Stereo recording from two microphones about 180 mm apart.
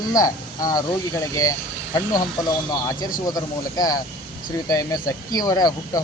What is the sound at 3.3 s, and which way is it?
A man's voice, 20° left (ahead or behind).